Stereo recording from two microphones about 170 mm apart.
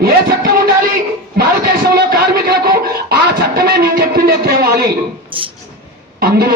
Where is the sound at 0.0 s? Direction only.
65° right (ahead or behind).